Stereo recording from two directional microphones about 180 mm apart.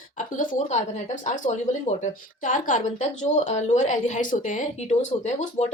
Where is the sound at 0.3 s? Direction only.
45° left (ahead or behind).